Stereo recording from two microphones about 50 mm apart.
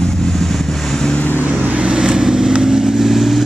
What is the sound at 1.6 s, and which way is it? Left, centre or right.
Vehicle, right.